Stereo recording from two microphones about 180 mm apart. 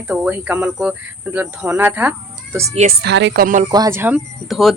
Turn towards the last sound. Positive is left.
turn(degrees=0)  # may be behind; listen again after turning